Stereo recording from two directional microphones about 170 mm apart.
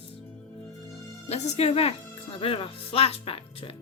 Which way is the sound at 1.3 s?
40° left (ahead or behind).